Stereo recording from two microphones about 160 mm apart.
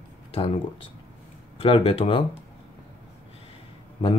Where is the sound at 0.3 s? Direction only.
35° left (ahead or behind).